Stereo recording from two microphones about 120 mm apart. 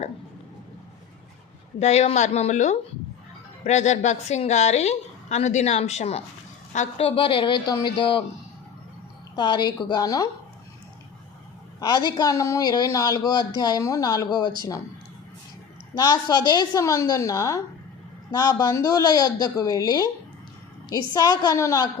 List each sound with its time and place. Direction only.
1.8 s a woman's voice: 65° left (ahead or behind)
7.0 s speech: 45° left (ahead or behind)
9.3 s a woman's voice: 40° left (ahead or behind)
11.8 s a woman's voice: 35° left (ahead or behind)
16.0 s a woman's voice: 30° left (ahead or behind)